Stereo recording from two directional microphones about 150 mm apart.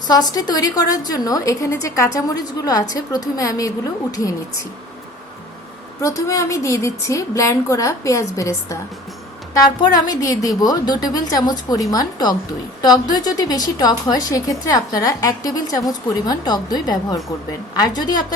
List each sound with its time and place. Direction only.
0.1 s a woman's voice: 25° left (ahead or behind)
6.0 s a woman's voice: 20° left (ahead or behind)